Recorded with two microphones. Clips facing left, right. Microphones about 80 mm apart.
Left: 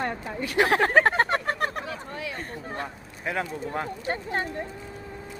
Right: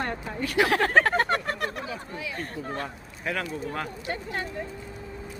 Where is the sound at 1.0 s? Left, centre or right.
Left.